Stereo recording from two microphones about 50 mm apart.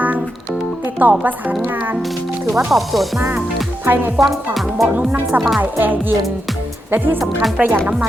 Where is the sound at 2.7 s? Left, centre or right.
Centre.